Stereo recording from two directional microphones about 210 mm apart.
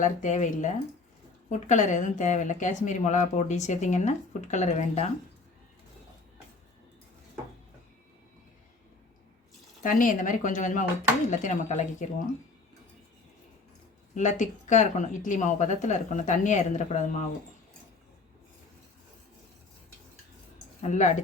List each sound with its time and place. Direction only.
0.0 s speech: 35° left (ahead or behind)
9.8 s speech: 40° left (ahead or behind)
14.2 s speech: 35° left (ahead or behind)
20.8 s speech: 35° left (ahead or behind)